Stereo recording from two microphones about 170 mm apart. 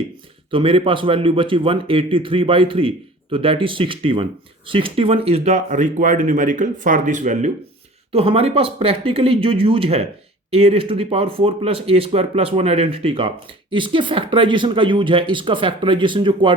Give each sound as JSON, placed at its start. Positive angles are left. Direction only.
{"t": 0.5, "sound": "speech", "side_deg": -30}